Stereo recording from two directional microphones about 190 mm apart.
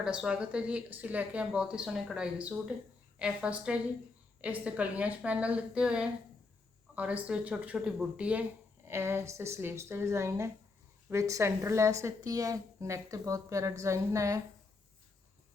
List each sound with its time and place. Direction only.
0.0 s speech: 5° right (ahead or behind)